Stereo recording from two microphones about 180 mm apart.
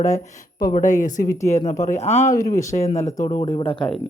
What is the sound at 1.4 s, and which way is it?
Speech, 40° left (ahead or behind).